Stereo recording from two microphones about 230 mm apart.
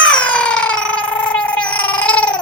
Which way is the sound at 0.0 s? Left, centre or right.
Centre.